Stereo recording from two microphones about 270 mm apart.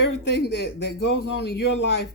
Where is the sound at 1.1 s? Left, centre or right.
Left.